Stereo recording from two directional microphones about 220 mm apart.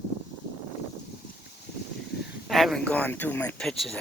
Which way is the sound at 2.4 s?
Centre (ahead or behind).